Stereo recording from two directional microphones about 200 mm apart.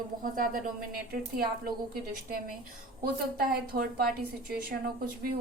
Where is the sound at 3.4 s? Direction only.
45° right (ahead or behind).